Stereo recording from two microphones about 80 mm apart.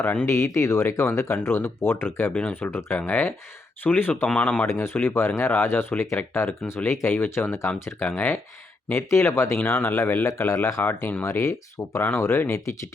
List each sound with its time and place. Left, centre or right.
0.0 s speech: left
0.3 s speech: left
4.4 s speech: centre
4.6 s speech: left
9.6 s speech: left
10.2 s speech: left
11.2 s speech: left